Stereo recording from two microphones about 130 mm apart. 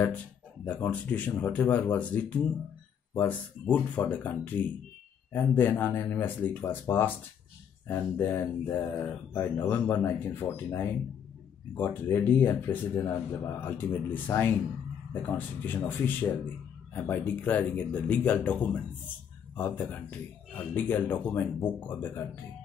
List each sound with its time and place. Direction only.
0.7 s a man's voice: 10° left (ahead or behind)